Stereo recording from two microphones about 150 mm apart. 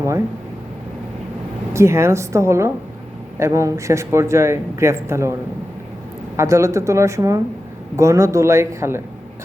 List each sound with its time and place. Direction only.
1.7 s speech: 20° right (ahead or behind)
6.3 s speech: 20° right (ahead or behind)